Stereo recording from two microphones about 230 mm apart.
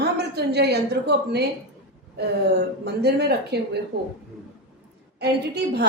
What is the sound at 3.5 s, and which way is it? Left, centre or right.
Speech, right.